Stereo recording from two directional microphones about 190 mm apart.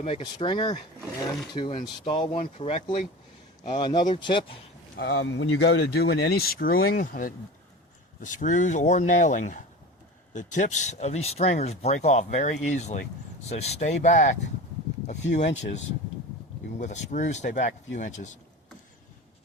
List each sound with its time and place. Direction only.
0.0 s speech: 30° left (ahead or behind)
4.9 s speech: 65° left (ahead or behind); by 18.3 s 40° left (ahead or behind)